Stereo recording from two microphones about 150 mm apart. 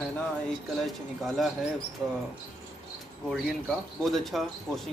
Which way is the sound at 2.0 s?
30° right (ahead or behind).